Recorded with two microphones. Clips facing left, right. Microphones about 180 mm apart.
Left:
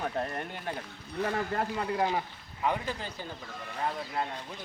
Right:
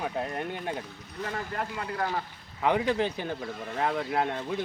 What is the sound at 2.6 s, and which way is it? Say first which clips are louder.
Speech: right 7 dB; 75° right (ahead or behind).